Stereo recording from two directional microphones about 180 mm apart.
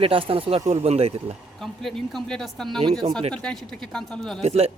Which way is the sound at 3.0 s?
40° right (ahead or behind).